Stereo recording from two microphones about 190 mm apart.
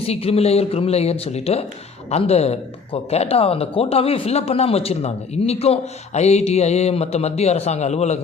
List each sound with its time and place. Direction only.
0.1 s speech: 30° left (ahead or behind)